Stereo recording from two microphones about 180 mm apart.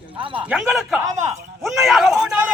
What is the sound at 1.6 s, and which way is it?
Speech, centre (ahead or behind).